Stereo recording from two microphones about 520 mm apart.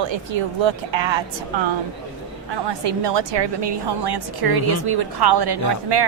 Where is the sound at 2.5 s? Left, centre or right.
Right.